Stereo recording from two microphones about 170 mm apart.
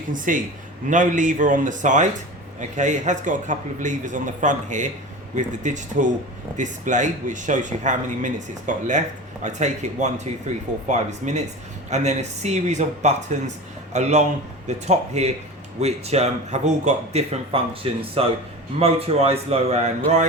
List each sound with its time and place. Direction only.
0.1 s a man's voice: 50° right (ahead or behind)